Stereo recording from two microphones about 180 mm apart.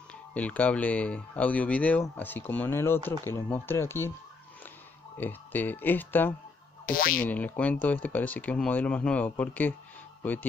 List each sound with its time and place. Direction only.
0.3 s speech: 10° left (ahead or behind)
5.1 s speech: 10° left (ahead or behind)
6.9 s speech: 50° left (ahead or behind)
7.2 s speech: 10° left (ahead or behind)